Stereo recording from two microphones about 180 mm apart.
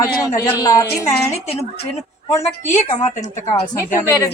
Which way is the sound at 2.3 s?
15° left (ahead or behind).